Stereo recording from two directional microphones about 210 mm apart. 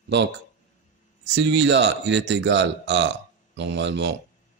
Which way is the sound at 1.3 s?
55° right (ahead or behind).